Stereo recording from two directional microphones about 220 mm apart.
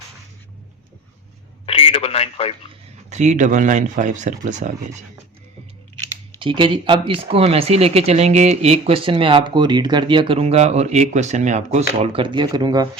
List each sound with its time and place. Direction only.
1.6 s telephone: 25° left (ahead or behind)
3.1 s speech: 30° right (ahead or behind)
6.4 s speech: 25° right (ahead or behind)